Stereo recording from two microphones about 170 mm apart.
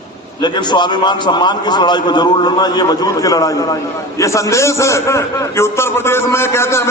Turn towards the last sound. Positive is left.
turn(degrees=15)  # may be behind; listen again after turning